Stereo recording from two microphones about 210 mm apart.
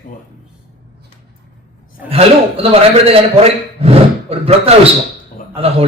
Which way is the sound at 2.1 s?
30° right (ahead or behind).